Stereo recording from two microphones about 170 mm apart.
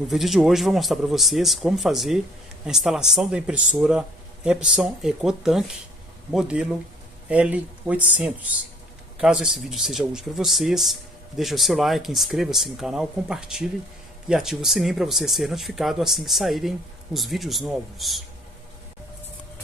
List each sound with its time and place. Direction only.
0.1 s speech: centre (ahead or behind)